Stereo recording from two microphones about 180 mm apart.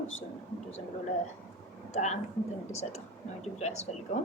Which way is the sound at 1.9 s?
40° left (ahead or behind).